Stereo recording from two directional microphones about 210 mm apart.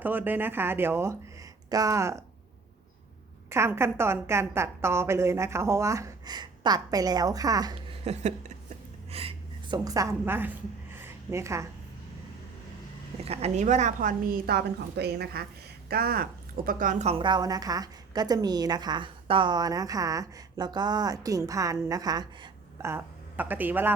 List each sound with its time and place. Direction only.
0.0 s speech: 10° right (ahead or behind)
3.5 s a woman's voice: 10° right (ahead or behind); by 8.5 s 30° right (ahead or behind)
9.0 s a sound: 25° right (ahead or behind)
13.2 s a woman's voice: 30° right (ahead or behind); by 23.9 s 10° right (ahead or behind)